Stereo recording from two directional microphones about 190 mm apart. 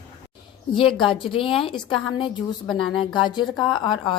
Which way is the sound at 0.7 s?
25° left (ahead or behind).